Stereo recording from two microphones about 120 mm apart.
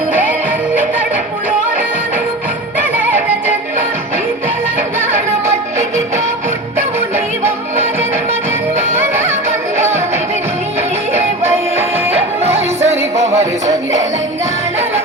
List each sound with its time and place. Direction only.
0.1 s music: 15° right (ahead or behind)
9.0 s music: 20° right (ahead or behind)
12.1 s music: 60° right (ahead or behind)